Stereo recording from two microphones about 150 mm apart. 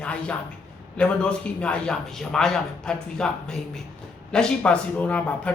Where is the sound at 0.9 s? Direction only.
5° left (ahead or behind).